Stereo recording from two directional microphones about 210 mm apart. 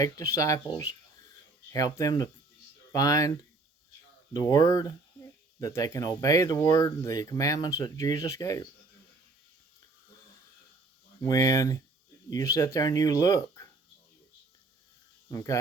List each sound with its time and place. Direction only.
0.0 s speech: 15° left (ahead or behind)
4.4 s speech: 15° left (ahead or behind)
11.2 s speech: 15° left (ahead or behind)
15.3 s speech: 15° left (ahead or behind)